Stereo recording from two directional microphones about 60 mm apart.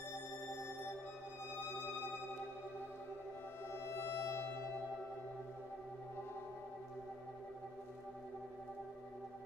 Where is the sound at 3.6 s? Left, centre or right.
Left.